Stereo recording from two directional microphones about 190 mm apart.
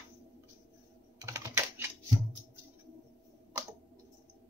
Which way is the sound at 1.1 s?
15° right (ahead or behind).